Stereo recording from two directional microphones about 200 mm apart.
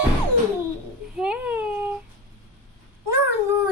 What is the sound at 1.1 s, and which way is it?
Baby cry, 5° right (ahead or behind).